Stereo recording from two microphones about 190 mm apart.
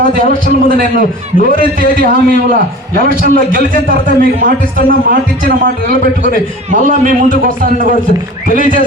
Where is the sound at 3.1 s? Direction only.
50° right (ahead or behind).